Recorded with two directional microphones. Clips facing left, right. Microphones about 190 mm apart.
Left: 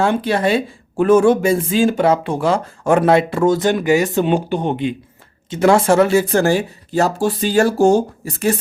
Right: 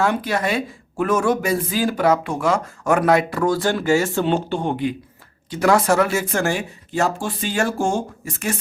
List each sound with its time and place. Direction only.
0.0 s speech: 30° left (ahead or behind)